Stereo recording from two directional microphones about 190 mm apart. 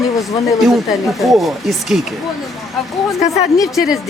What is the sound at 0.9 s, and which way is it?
A man's voice, centre (ahead or behind).